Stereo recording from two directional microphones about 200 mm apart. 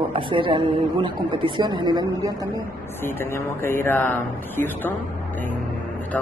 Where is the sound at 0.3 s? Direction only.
25° right (ahead or behind).